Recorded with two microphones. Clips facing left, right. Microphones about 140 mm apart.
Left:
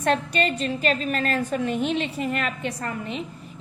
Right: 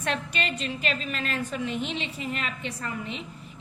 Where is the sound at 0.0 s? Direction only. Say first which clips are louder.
Left 7 dB; 40° left (ahead or behind).